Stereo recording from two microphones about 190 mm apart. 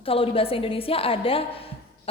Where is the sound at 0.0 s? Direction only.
30° left (ahead or behind).